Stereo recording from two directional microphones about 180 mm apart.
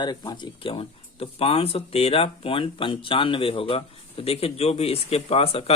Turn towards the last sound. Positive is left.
turn(degrees=35)  # may be behind; listen again after turning